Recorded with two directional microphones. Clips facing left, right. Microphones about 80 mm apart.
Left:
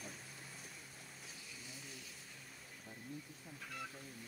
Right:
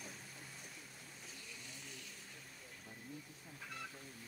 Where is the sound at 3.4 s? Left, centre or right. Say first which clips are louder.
Left 1 dB; centre.